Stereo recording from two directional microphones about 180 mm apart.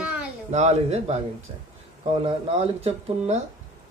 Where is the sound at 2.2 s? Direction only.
35° right (ahead or behind).